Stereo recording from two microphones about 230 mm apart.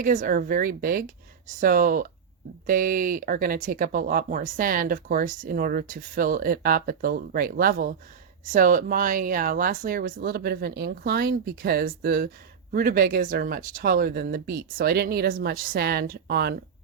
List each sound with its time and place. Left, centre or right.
0.0 s speech: right